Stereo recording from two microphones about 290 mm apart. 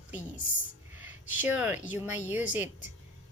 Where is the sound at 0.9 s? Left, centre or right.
Centre.